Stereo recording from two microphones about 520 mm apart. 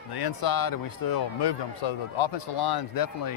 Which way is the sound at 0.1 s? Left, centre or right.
Left.